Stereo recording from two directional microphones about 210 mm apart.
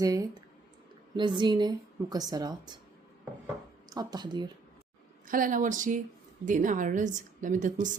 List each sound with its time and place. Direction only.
0.0 s speech: 15° right (ahead or behind)
1.4 s a woman's voice: 20° right (ahead or behind)
3.4 s a sound: 20° right (ahead or behind)
5.3 s a woman's voice: 40° right (ahead or behind)